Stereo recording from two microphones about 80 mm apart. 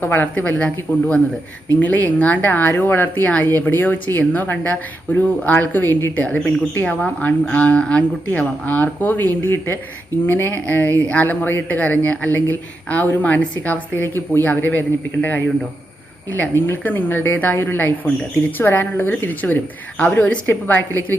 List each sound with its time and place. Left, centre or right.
0.0 s speech: left
6.2 s speech: centre